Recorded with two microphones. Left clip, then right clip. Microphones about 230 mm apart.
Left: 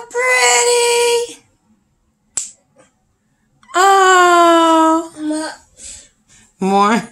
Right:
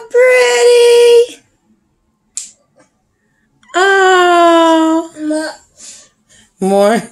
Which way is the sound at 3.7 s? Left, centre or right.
Left.